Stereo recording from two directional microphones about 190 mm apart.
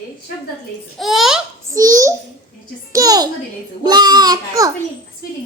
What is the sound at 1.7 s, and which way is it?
A child's voice, 15° right (ahead or behind).